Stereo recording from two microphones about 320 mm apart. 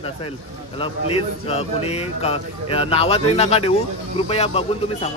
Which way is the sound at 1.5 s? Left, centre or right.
Centre.